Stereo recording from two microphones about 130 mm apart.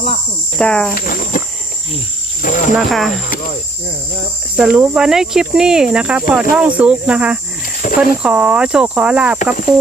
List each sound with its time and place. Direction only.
0.6 s speech: 10° left (ahead or behind)
0.9 s speech: 90° left
2.4 s speech: 75° left (ahead or behind)
2.7 s speech: centre (ahead or behind)
4.5 s speech: 10° right (ahead or behind)
7.8 s a sound: 90° left
8.2 s speech: 10° right (ahead or behind)